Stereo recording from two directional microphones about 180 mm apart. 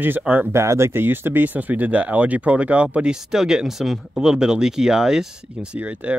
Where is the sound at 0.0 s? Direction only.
10° right (ahead or behind).